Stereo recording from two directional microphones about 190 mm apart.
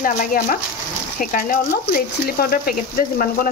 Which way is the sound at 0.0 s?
45° left (ahead or behind).